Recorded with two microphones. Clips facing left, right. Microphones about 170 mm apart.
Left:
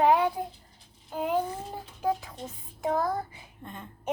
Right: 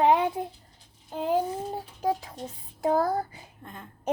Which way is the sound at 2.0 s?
35° right (ahead or behind).